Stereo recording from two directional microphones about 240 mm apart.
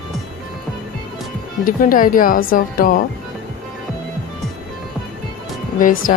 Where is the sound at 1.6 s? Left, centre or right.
Left.